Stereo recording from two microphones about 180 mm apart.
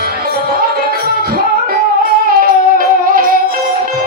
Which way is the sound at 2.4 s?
50° right (ahead or behind).